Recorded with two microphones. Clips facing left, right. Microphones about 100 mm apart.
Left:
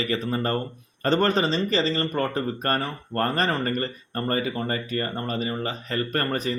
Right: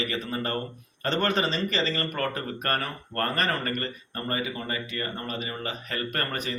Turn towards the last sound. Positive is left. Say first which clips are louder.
# left 5 dB
turn(degrees=35)  # may be behind; listen again after turning